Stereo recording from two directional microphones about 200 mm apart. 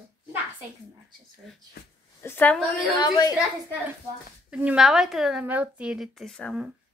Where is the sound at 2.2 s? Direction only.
10° left (ahead or behind).